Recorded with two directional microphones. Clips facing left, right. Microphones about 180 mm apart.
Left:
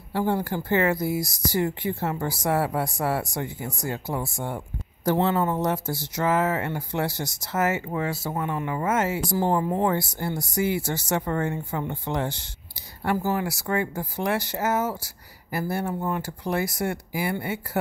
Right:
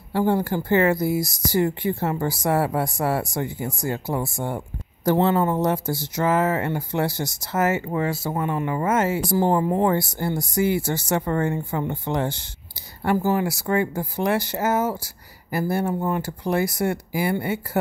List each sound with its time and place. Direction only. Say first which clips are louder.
0.1 s speech: right 4 dB; 40° right (ahead or behind)
9.7 s speech: right 3 dB; 45° right (ahead or behind)
13.0 s speech: right 4 dB; 30° right (ahead or behind)